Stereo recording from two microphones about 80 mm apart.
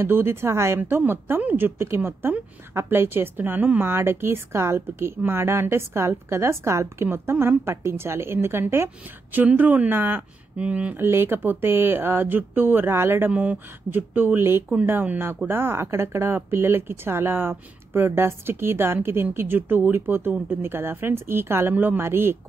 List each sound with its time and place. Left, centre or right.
0.0 s speech: right